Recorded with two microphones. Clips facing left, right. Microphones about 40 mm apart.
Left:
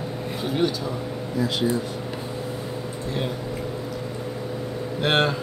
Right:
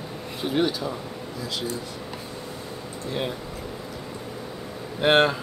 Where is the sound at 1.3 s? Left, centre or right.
Left.